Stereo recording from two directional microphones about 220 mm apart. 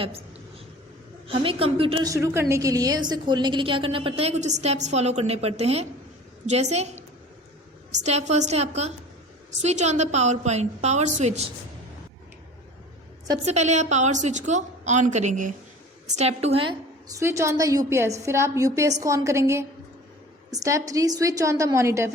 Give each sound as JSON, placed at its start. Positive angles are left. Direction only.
{"t": 1.3, "sound": "a woman's voice", "side_deg": -25}
{"t": 13.4, "sound": "a woman's voice", "side_deg": -30}